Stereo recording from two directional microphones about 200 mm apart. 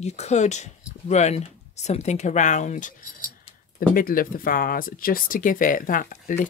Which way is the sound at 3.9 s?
45° left (ahead or behind).